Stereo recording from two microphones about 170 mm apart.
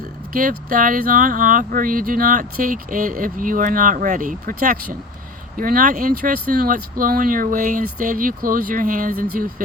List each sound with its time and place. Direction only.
0.3 s speech: 50° right (ahead or behind)